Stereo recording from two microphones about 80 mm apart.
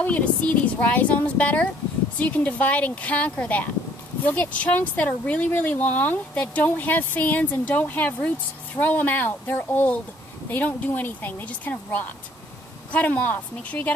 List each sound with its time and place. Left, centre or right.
0.0 s speech: centre